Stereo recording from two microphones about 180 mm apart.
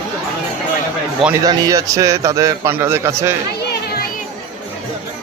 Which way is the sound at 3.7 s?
60° left (ahead or behind).